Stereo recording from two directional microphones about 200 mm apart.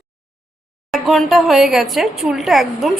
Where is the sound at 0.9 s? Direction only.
Centre (ahead or behind).